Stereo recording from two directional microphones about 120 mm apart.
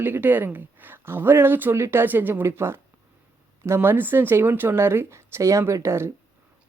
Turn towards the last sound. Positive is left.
turn(degrees=-20)  # may be behind; listen again after turning